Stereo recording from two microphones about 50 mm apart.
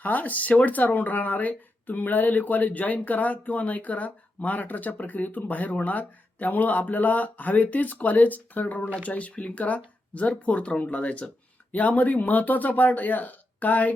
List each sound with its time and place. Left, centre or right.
0.0 s speech: left